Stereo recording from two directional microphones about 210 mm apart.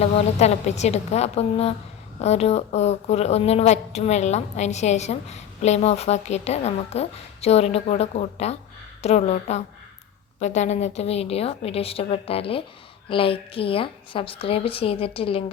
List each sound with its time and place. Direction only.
0.0 s a woman's voice: 30° left (ahead or behind)